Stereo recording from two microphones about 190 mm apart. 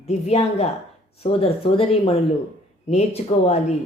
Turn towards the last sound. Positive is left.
turn(degrees=35)  # may be behind; listen again after turning